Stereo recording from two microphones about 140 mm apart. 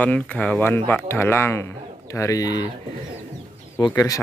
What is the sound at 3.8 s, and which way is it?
Speech, 25° left (ahead or behind).